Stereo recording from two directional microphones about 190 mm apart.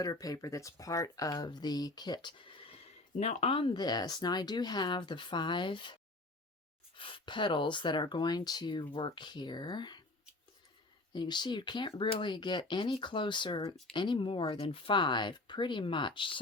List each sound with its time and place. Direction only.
0.0 s speech: 20° left (ahead or behind)
11.1 s speech: 25° left (ahead or behind)